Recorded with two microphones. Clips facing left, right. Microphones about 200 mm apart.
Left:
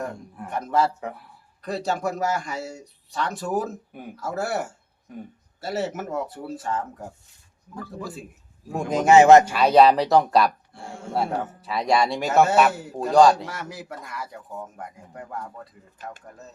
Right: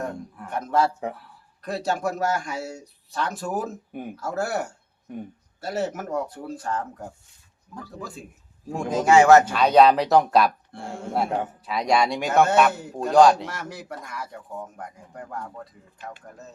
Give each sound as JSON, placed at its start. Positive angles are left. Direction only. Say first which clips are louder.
{"t": 0.5, "sound": "speech", "louder": "even", "side_deg": 0}
{"t": 8.7, "sound": "a man's voice", "louder": "left 2 dB", "side_deg": 20}
{"t": 9.5, "sound": "speech", "louder": "even", "side_deg": 5}
{"t": 10.7, "sound": "speech", "louder": "right 4 dB", "side_deg": -55}
{"t": 11.2, "sound": "speech", "louder": "even", "side_deg": 0}